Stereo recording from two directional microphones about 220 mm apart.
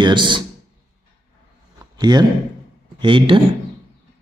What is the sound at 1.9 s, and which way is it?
A man's voice, 20° right (ahead or behind).